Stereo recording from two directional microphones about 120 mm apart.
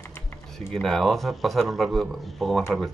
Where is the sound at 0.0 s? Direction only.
20° left (ahead or behind).